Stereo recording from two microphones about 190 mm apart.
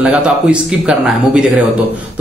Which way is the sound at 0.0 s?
5° right (ahead or behind).